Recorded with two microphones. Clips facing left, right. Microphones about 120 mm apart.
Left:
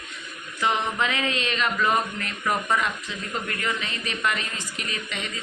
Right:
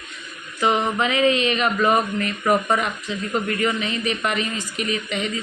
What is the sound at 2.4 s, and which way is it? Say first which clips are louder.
Speech: right 5 dB; 40° right (ahead or behind).